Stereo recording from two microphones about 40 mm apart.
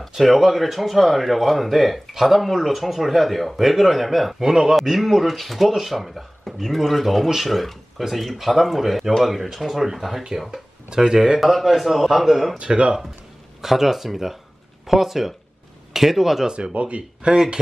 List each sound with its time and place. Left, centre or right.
0.1 s speech: centre
10.9 s speech: centre
11.3 s speech: centre
12.5 s speech: right
13.6 s speech: centre
16.4 s speech: right
17.3 s speech: centre